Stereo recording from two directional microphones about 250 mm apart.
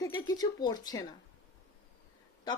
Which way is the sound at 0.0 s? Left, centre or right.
Centre.